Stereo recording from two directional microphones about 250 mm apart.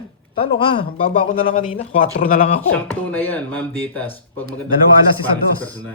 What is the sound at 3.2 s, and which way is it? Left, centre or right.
Speech, centre.